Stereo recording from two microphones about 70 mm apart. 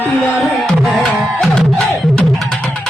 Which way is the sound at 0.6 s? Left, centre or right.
Centre.